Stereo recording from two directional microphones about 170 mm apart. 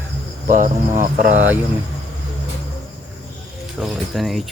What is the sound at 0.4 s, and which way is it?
Speech, 50° right (ahead or behind).